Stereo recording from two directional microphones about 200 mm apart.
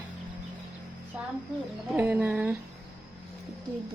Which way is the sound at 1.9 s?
5° right (ahead or behind).